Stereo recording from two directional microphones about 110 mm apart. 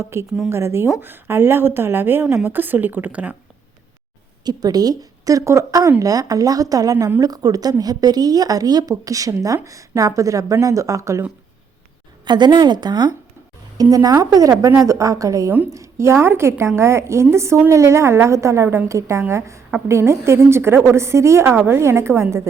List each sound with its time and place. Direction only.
0.0 s a woman's voice: 25° right (ahead or behind)
0.3 s speech: 5° right (ahead or behind)
0.5 s a woman's voice: 25° right (ahead or behind)
4.4 s a woman's voice: 35° right (ahead or behind)
12.2 s a woman's voice: 40° right (ahead or behind); by 22.4 s 25° right (ahead or behind)